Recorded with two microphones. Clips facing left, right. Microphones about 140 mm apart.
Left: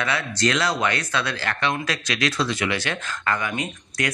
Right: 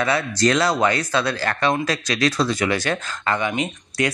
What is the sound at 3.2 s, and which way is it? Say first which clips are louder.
Speech: right 3 dB; 25° right (ahead or behind).